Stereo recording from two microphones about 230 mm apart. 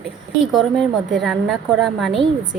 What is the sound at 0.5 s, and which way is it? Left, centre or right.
A woman's voice, centre.